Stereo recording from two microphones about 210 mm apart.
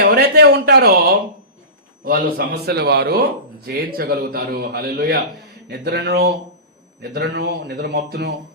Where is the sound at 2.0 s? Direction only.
40° right (ahead or behind).